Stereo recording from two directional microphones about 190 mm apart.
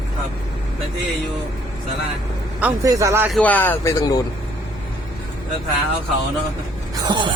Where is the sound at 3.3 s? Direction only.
10° left (ahead or behind).